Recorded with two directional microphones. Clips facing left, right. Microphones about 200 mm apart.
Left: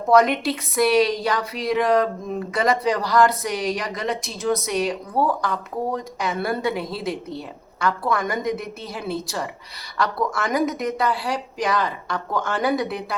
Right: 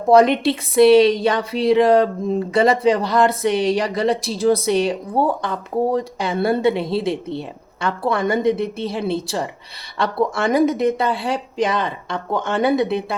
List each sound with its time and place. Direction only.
0.1 s a woman's voice: 30° right (ahead or behind)